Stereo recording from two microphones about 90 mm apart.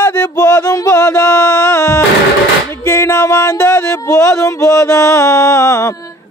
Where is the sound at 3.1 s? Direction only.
40° left (ahead or behind).